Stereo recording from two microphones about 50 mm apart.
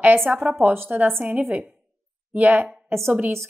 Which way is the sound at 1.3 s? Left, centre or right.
Right.